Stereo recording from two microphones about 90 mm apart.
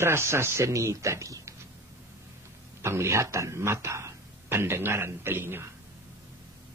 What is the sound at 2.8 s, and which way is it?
A man's voice, 30° right (ahead or behind).